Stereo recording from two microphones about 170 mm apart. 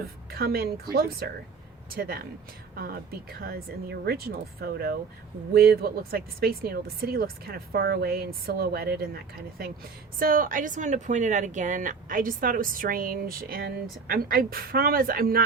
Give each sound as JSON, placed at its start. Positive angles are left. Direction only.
{"t": 0.3, "sound": "speech", "side_deg": -65}
{"t": 10.2, "sound": "speech", "side_deg": -55}